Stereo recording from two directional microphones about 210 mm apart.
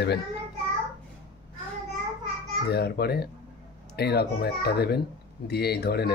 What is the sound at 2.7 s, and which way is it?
A child's voice, 50° left (ahead or behind).